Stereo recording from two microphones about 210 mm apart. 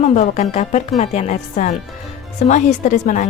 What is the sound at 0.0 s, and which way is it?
A woman's voice, 35° left (ahead or behind).